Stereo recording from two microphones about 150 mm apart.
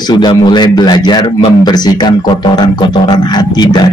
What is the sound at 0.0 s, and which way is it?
A man's voice, 30° left (ahead or behind).